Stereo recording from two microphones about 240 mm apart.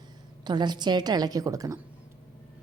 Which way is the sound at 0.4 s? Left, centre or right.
Centre.